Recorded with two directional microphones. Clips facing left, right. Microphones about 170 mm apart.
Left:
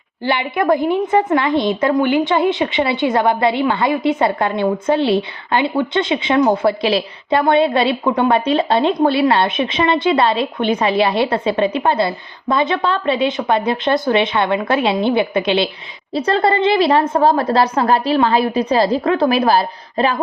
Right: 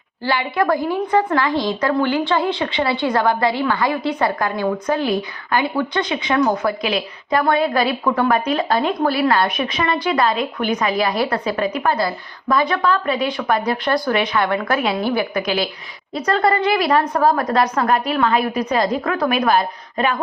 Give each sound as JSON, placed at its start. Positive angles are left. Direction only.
{"t": 0.3, "sound": "a woman's voice", "side_deg": 20}